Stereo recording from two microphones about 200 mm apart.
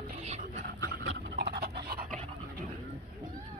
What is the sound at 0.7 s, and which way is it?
Dog, 65° right (ahead or behind).